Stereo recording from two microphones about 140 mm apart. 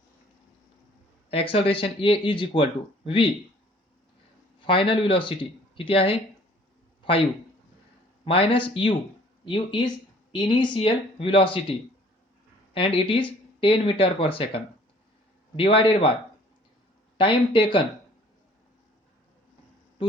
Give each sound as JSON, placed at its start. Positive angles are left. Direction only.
{"t": 1.3, "sound": "speech", "side_deg": 40}
{"t": 4.6, "sound": "speech", "side_deg": 40}
{"t": 8.2, "sound": "speech", "side_deg": 40}
{"t": 17.2, "sound": "speech", "side_deg": 40}